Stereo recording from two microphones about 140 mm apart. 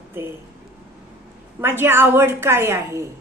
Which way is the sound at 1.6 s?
15° right (ahead or behind).